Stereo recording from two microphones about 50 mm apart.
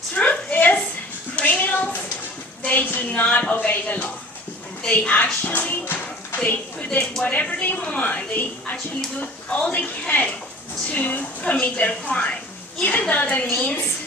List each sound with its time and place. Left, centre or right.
0.1 s a sound: left
3.3 s a woman's voice: left
6.4 s a woman's voice: left